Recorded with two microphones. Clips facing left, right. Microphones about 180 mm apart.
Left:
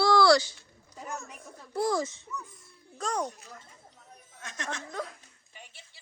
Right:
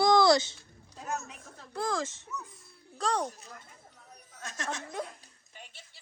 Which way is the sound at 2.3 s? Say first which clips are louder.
Left 1 dB; centre (ahead or behind).